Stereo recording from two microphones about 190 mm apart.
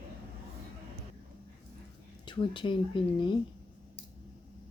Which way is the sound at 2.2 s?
25° left (ahead or behind).